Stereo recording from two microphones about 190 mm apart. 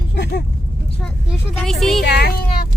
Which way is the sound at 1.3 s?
Centre (ahead or behind).